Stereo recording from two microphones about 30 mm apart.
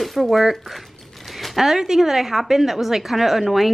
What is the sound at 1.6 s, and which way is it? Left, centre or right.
A woman's voice, centre.